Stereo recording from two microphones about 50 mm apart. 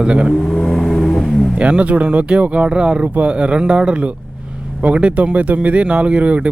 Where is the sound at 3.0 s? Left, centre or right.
Right.